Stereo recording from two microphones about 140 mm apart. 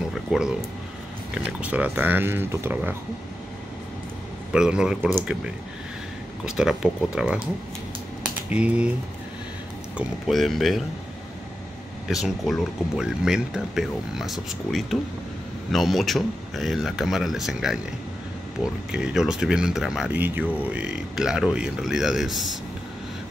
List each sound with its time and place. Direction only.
0.1 s a sound: 5° right (ahead or behind)
1.6 s speech: 10° right (ahead or behind)
4.5 s speech: 5° right (ahead or behind)
6.4 s speech: 5° right (ahead or behind)
8.2 s a sound: 10° right (ahead or behind)
9.9 s speech: centre (ahead or behind)
12.1 s speech: centre (ahead or behind)